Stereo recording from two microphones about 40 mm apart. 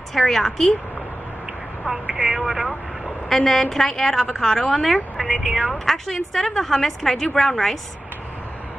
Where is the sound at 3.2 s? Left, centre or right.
Centre.